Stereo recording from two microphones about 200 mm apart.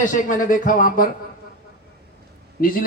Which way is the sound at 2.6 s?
45° left (ahead or behind).